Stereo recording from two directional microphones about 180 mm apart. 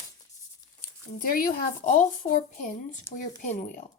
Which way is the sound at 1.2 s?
50° left (ahead or behind).